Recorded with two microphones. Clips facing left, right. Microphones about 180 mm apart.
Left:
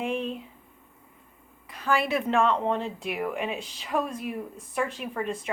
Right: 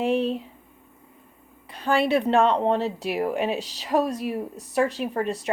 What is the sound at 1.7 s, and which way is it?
A woman's voice, 30° right (ahead or behind).